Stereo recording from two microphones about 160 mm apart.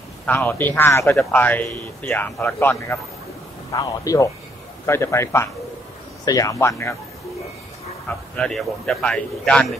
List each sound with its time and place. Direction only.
0.3 s speech: 15° left (ahead or behind)
8.4 s a man's voice: 5° left (ahead or behind)